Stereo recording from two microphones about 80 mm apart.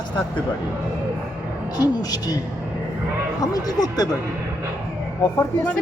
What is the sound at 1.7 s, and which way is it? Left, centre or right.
Speech, left.